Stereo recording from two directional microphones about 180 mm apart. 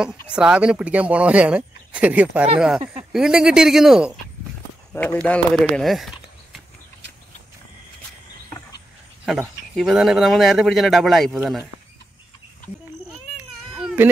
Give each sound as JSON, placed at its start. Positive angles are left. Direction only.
{"t": 0.0, "sound": "speech", "side_deg": -5}
{"t": 2.8, "sound": "speech", "side_deg": -30}
{"t": 3.1, "sound": "speech", "side_deg": -5}
{"t": 4.9, "sound": "speech", "side_deg": 10}
{"t": 9.8, "sound": "speech", "side_deg": 0}
{"t": 13.4, "sound": "cat", "side_deg": -5}